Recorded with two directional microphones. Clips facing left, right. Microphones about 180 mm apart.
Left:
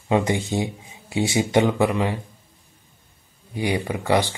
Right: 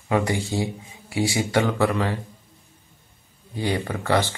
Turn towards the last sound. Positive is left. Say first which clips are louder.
# left 2 dB
turn(degrees=15)  # may be behind; listen again after turning